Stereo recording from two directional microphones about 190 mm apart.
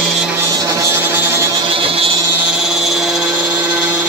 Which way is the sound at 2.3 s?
5° right (ahead or behind).